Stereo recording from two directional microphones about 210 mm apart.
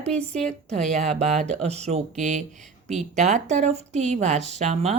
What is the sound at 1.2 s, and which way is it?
Speech, 30° right (ahead or behind).